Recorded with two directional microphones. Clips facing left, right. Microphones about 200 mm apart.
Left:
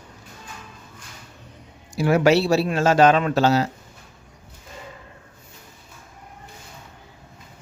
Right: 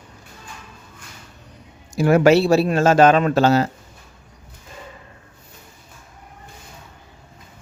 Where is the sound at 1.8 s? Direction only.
50° right (ahead or behind).